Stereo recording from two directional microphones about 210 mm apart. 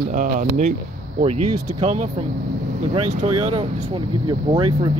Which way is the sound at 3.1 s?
30° right (ahead or behind).